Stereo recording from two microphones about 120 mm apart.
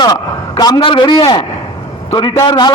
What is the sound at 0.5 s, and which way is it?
Speech, 35° left (ahead or behind).